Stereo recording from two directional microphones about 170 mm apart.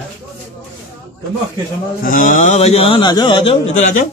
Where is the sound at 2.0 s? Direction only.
55° left (ahead or behind); by 3.8 s 35° left (ahead or behind).